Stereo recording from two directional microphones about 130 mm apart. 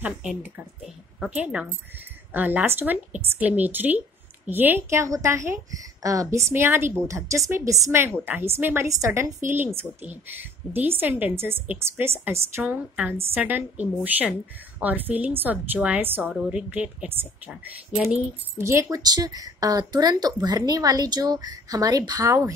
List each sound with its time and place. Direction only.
0.0 s a woman's voice: 10° right (ahead or behind)
18.6 s speech: 20° right (ahead or behind)